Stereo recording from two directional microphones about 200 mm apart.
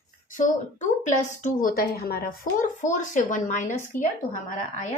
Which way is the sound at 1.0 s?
40° left (ahead or behind).